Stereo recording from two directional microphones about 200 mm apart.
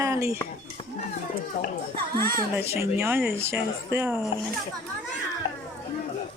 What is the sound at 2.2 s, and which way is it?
Speech, 50° right (ahead or behind).